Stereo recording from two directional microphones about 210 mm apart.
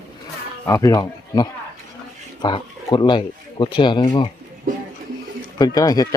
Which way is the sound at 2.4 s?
20° left (ahead or behind).